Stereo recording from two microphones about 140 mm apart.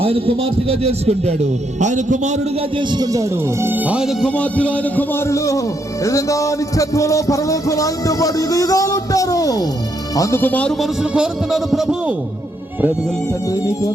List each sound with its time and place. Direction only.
0.0 s a man's voice: 40° right (ahead or behind)
1.8 s a man's voice: 60° right (ahead or behind)
2.7 s speech: 30° right (ahead or behind); by 4.3 s 5° right (ahead or behind)
4.3 s a man's voice: 10° left (ahead or behind)